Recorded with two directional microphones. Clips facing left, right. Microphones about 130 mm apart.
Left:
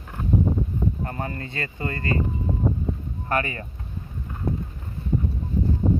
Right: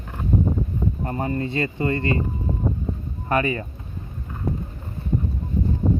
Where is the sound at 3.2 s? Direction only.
20° right (ahead or behind).